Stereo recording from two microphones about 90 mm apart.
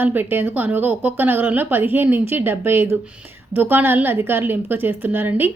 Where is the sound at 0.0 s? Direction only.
20° right (ahead or behind).